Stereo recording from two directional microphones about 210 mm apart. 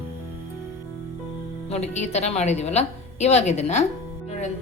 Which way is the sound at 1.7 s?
30° left (ahead or behind).